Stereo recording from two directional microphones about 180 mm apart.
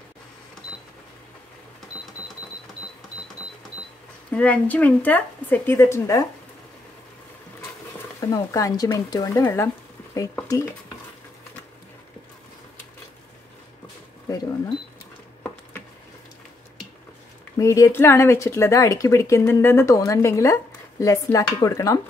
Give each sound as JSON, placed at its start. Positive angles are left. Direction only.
{"t": 4.3, "sound": "speech", "side_deg": 10}
{"t": 8.2, "sound": "speech", "side_deg": 20}
{"t": 14.3, "sound": "cash register", "side_deg": 20}
{"t": 17.6, "sound": "speech", "side_deg": 20}